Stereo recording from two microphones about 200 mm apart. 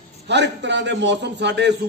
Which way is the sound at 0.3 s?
60° right (ahead or behind).